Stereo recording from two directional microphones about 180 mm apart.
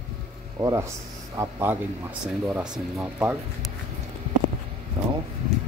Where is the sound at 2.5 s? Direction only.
Centre (ahead or behind).